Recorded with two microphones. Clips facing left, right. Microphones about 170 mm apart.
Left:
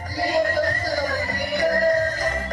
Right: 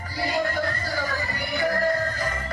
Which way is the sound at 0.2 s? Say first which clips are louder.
Left 5 dB; 40° left (ahead or behind).